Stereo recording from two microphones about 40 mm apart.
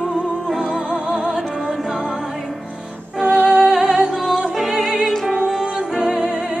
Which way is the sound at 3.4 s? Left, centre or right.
Centre.